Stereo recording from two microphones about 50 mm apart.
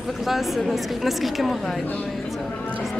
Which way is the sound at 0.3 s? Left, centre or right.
Centre.